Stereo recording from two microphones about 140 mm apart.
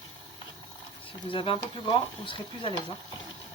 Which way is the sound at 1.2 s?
40° left (ahead or behind).